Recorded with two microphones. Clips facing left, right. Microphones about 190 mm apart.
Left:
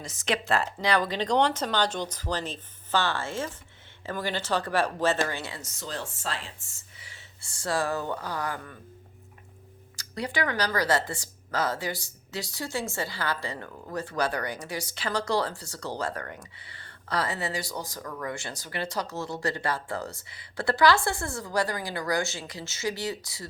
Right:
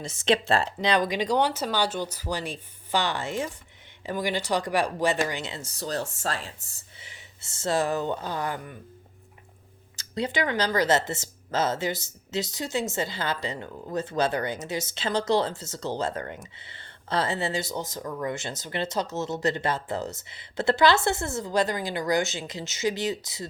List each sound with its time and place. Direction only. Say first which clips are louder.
0.0 s speech: right 6 dB; 25° right (ahead or behind)
7.0 s speech: right 2 dB; 25° right (ahead or behind)
9.9 s speech: right 3 dB; 25° right (ahead or behind)